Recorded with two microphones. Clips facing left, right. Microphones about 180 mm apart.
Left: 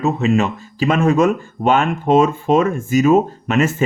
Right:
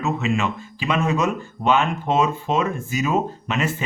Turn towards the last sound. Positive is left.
turn(degrees=45)  # may be behind; listen again after turning